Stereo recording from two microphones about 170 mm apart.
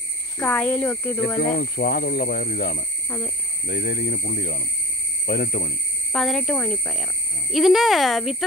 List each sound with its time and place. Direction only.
0.4 s speech: 10° left (ahead or behind)
1.6 s speech: 65° left (ahead or behind)
6.1 s speech: centre (ahead or behind)